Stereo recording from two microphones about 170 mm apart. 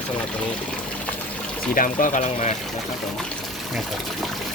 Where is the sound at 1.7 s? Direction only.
55° left (ahead or behind).